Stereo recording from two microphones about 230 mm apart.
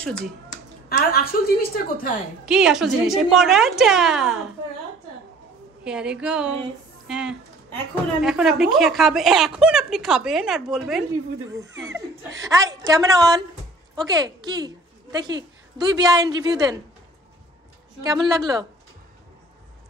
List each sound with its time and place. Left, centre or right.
0.8 s a woman's voice: left
2.4 s a woman's voice: centre
5.9 s a woman's voice: centre
11.9 s speech: right
12.4 s a woman's voice: centre
18.4 s a woman's voice: centre